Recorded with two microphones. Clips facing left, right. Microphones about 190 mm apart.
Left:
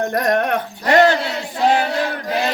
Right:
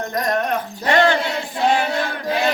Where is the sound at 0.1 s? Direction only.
60° left (ahead or behind).